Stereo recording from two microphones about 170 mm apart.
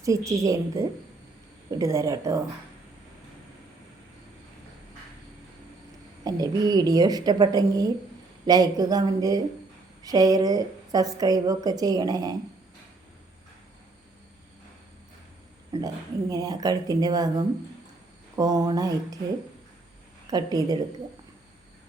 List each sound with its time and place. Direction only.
0.0 s a woman's voice: 20° right (ahead or behind)
6.2 s a woman's voice: 25° right (ahead or behind)
15.7 s a woman's voice: 20° right (ahead or behind)
20.3 s a woman's voice: 25° right (ahead or behind)